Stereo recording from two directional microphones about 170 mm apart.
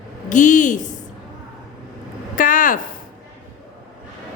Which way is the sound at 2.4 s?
55° left (ahead or behind).